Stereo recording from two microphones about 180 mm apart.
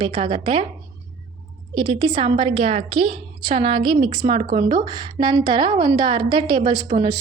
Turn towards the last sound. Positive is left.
turn(degrees=-35)  # may be behind; listen again after turning